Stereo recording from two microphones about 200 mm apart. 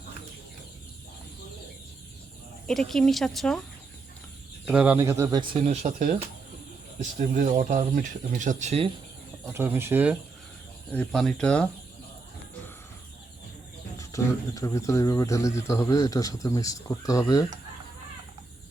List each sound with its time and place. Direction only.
2.6 s speech: centre (ahead or behind)
4.6 s speech: 5° right (ahead or behind)
5.6 s speech: 35° right (ahead or behind)
9.5 s speech: 10° right (ahead or behind)
10.9 s speech: centre (ahead or behind)
14.0 s speech: 15° left (ahead or behind)